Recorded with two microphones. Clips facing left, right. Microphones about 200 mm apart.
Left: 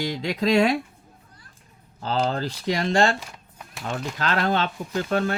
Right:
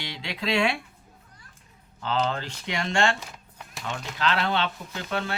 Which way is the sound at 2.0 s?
35° left (ahead or behind).